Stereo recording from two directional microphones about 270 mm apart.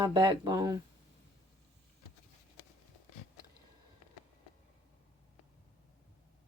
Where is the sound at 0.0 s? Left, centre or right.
Centre.